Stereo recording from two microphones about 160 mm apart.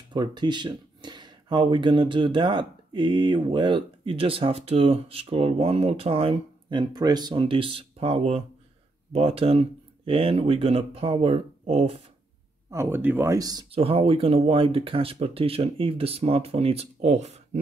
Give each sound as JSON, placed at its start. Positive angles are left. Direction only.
{"t": 0.1, "sound": "speech", "side_deg": -25}
{"t": 12.7, "sound": "speech", "side_deg": -10}
{"t": 13.7, "sound": "speech", "side_deg": -35}